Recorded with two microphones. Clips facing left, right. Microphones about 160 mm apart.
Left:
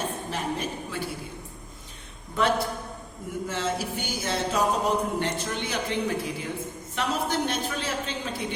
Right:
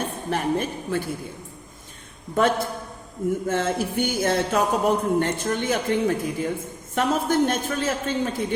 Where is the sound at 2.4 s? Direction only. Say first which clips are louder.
Right 3 dB; 50° right (ahead or behind).